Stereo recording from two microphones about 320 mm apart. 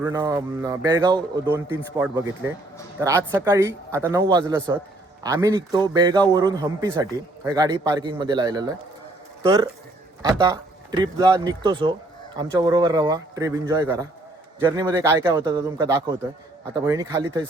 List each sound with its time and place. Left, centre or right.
0.0 s a man's voice: centre